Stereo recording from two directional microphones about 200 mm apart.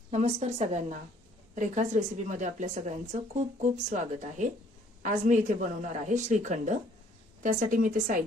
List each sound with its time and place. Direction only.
0.1 s a woman's voice: 35° right (ahead or behind)